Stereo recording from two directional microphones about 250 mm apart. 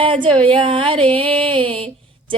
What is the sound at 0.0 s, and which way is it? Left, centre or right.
Music, right.